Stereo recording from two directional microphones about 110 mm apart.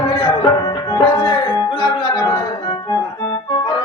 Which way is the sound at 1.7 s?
45° left (ahead or behind).